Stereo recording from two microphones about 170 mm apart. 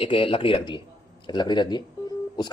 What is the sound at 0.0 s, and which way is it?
A man's voice, 30° left (ahead or behind).